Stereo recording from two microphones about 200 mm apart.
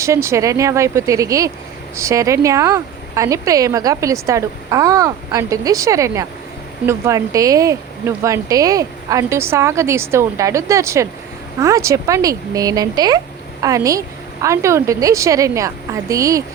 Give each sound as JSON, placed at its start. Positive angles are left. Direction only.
{"t": 0.0, "sound": "speech", "side_deg": -15}